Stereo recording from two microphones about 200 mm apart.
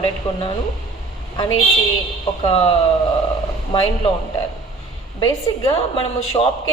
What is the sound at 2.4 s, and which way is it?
Speech, 30° left (ahead or behind).